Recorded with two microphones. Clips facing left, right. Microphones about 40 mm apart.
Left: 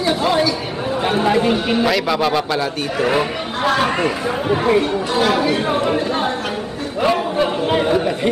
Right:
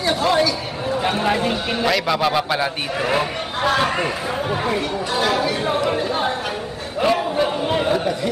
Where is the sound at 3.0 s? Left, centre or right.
Centre.